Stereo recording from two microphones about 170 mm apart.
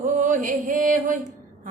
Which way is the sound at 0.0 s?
50° right (ahead or behind).